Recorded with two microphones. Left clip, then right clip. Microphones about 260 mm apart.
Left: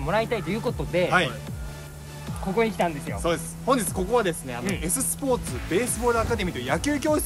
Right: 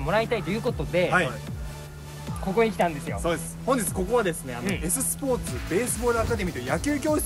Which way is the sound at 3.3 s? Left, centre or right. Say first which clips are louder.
Left 2 dB; centre.